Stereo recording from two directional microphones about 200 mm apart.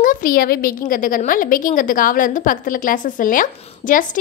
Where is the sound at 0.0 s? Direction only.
45° left (ahead or behind).